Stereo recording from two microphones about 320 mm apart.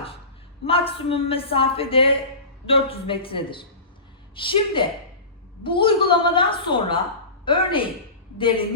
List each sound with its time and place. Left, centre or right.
0.6 s a woman's voice: centre